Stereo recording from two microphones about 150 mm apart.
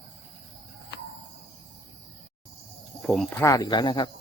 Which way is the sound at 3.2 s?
20° left (ahead or behind).